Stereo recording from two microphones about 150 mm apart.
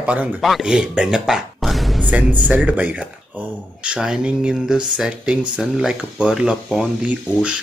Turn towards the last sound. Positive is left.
turn(degrees=-10)  # may be behind; listen again after turning